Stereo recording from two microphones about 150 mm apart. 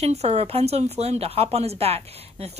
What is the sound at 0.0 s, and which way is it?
Speech, 45° right (ahead or behind).